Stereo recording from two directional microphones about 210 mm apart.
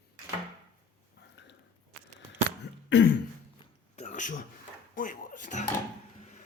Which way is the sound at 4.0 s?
35° left (ahead or behind).